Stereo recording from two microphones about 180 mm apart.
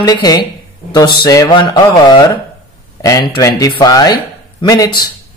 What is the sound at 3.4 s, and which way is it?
Speech, 20° left (ahead or behind).